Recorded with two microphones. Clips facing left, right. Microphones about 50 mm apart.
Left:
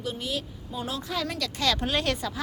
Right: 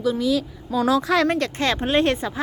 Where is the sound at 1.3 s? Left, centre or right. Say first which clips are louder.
Right 6 dB; right.